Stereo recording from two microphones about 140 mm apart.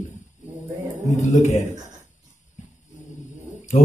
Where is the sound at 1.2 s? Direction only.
60° left (ahead or behind).